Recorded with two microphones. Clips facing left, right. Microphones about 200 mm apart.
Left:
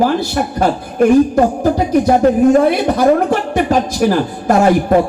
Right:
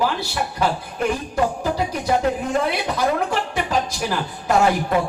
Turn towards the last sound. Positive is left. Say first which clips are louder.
# left 7 dB
turn(degrees=50)  # may be behind; listen again after turning